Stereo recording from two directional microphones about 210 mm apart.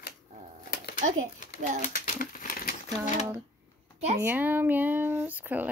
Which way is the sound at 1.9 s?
40° left (ahead or behind).